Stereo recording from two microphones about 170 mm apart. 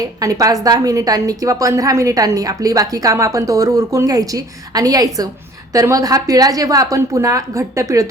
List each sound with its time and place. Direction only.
0.2 s a woman's voice: 20° right (ahead or behind)